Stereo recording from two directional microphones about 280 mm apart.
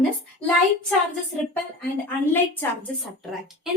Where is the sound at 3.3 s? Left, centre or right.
Centre.